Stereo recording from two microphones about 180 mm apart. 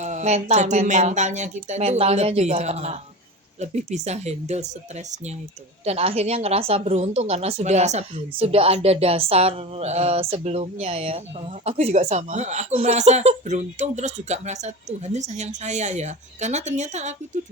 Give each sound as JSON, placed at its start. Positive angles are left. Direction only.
{"t": 0.0, "sound": "speech", "side_deg": -40}
{"t": 5.8, "sound": "speech", "side_deg": -35}